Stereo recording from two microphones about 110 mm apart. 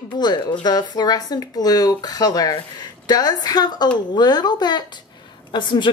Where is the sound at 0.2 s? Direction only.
40° left (ahead or behind).